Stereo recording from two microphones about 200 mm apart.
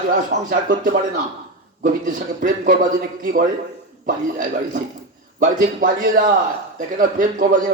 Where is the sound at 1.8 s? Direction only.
40° right (ahead or behind).